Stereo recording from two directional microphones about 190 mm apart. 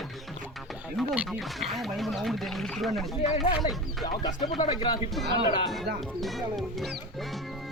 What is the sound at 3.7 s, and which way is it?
Speech, 20° left (ahead or behind).